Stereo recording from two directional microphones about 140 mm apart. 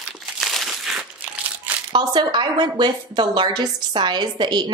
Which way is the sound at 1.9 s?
30° right (ahead or behind).